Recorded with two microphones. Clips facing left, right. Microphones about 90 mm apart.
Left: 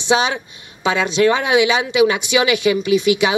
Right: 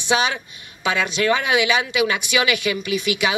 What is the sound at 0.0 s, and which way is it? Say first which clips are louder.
Speech: left 3 dB; 20° left (ahead or behind).